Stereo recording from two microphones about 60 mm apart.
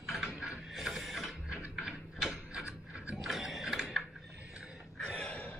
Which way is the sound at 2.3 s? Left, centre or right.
Centre.